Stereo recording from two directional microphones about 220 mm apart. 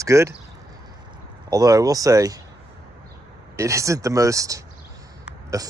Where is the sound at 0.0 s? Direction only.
15° right (ahead or behind).